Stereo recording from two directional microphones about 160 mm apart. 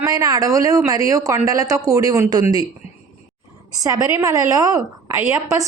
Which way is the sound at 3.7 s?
20° right (ahead or behind).